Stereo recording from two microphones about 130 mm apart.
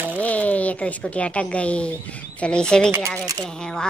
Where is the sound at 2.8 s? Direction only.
20° right (ahead or behind).